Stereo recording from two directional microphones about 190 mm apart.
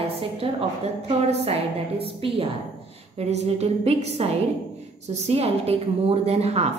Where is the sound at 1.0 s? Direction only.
30° right (ahead or behind).